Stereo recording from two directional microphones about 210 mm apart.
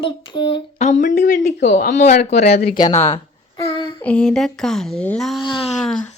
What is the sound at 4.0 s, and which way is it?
A child's voice, 5° left (ahead or behind).